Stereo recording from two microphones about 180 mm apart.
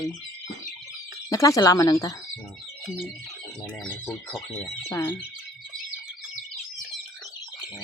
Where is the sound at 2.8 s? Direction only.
Centre (ahead or behind).